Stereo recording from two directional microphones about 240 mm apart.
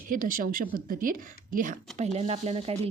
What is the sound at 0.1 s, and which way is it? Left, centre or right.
Speech, right.